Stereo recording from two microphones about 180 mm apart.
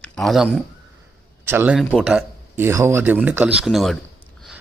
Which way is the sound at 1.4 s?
10° right (ahead or behind).